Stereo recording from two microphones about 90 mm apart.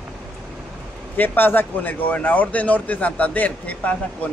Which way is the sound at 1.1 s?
20° left (ahead or behind).